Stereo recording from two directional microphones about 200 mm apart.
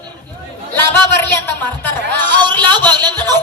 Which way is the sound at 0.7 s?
10° left (ahead or behind).